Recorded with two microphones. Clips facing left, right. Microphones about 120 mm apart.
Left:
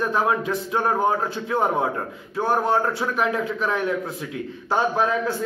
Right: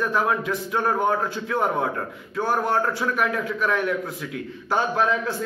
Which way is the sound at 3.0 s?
25° left (ahead or behind).